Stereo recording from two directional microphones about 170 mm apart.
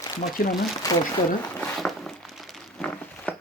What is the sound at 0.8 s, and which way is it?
Speech, 20° left (ahead or behind).